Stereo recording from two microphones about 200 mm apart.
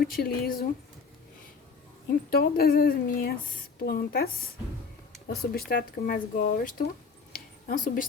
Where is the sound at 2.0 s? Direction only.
50° left (ahead or behind).